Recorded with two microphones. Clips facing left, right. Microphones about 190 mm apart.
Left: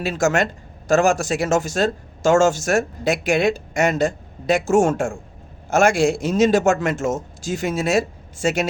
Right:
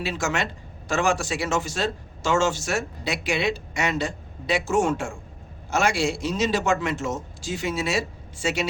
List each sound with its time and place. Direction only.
0.0 s speech: 45° left (ahead or behind)